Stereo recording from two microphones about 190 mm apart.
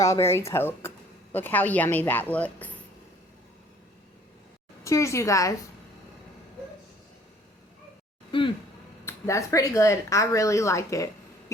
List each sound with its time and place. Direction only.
0.0 s speech: 15° left (ahead or behind)
4.8 s a woman's voice: 15° left (ahead or behind)
8.3 s speech: 25° left (ahead or behind)
9.0 s speech: 15° left (ahead or behind)